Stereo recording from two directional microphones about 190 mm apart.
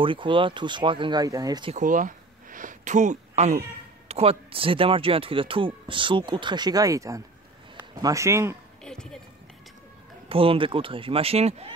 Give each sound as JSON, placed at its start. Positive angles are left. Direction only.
{"t": 0.0, "sound": "speech", "side_deg": -25}
{"t": 1.8, "sound": "a sound", "side_deg": -45}
{"t": 4.1, "sound": "speech", "side_deg": -30}
{"t": 8.8, "sound": "run", "side_deg": 5}
{"t": 10.2, "sound": "speech", "side_deg": -30}